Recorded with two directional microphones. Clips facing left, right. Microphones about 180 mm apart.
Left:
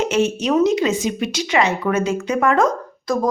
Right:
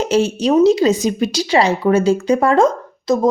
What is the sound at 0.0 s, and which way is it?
A woman's voice, 35° right (ahead or behind).